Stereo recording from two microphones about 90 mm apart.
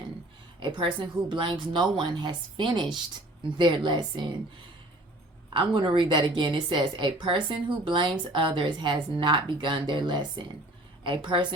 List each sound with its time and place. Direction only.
0.6 s speech: 65° right (ahead or behind)
5.5 s a woman's voice: 70° right (ahead or behind)